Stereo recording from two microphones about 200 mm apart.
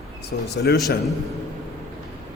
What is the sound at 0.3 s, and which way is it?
Speech, 55° left (ahead or behind).